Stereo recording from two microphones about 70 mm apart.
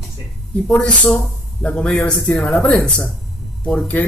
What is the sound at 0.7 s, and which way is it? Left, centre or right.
A man's voice, centre.